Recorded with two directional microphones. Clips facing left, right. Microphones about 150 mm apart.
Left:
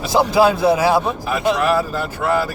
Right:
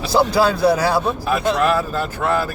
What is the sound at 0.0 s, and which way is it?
A man's voice, 20° left (ahead or behind).